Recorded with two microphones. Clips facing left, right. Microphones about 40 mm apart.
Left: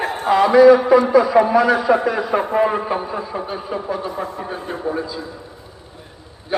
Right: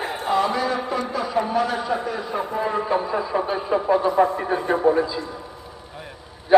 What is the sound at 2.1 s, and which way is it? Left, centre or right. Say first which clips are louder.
Speech: left 7 dB; left.